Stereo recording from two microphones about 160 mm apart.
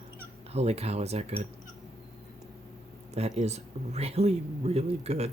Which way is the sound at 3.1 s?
40° right (ahead or behind).